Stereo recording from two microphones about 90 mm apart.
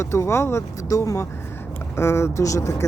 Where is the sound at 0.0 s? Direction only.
30° left (ahead or behind).